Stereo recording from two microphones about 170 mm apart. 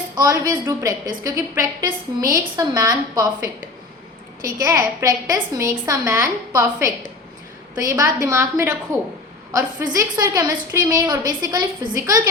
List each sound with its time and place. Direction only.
0.2 s a woman's voice: 20° right (ahead or behind)
4.6 s a woman's voice: 20° right (ahead or behind)